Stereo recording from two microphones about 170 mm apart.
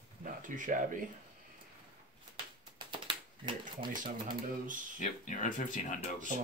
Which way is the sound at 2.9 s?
30° right (ahead or behind).